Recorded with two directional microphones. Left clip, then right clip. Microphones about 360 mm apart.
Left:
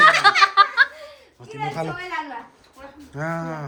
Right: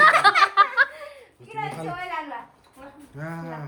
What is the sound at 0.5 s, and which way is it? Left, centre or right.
Laughter, centre.